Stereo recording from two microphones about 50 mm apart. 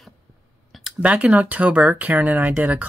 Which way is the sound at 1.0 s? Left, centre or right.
Right.